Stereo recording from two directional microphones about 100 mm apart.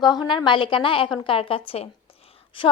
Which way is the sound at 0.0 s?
45° left (ahead or behind).